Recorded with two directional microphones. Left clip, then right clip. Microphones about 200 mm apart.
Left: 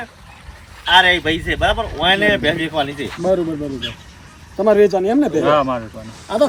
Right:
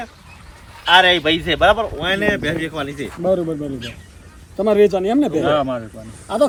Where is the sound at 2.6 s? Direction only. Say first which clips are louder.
Left 4 dB; 45° right (ahead or behind).